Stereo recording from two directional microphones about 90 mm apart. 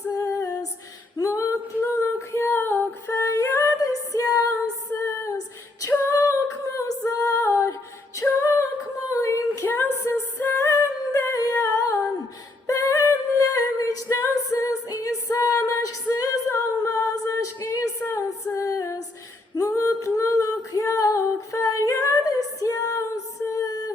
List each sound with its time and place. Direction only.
0.1 s female singing: 40° left (ahead or behind); by 3.7 s 25° left (ahead or behind)
3.8 s female singing: 40° left (ahead or behind)
7.6 s a capella: 35° left (ahead or behind)
9.6 s music: 25° left (ahead or behind)
11.6 s humming: 35° left (ahead or behind)
12.6 s a capella: 35° left (ahead or behind)
17.6 s female singing: 35° left (ahead or behind)